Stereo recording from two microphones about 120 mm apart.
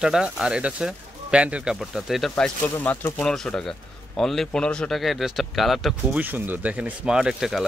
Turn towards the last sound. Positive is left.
turn(degrees=-5)  # may be behind; listen again after turning